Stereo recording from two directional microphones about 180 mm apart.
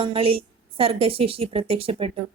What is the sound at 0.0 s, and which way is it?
Speech, 30° right (ahead or behind).